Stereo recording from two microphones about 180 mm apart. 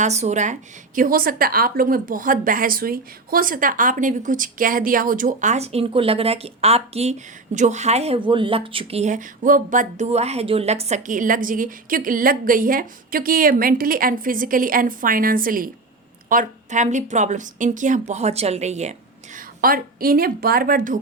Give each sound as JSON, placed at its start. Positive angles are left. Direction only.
{"t": 0.0, "sound": "speech", "side_deg": -40}
{"t": 0.9, "sound": "a woman's voice", "side_deg": -50}